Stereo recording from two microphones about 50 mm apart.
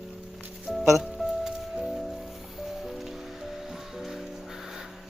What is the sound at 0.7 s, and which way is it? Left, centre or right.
Music, centre.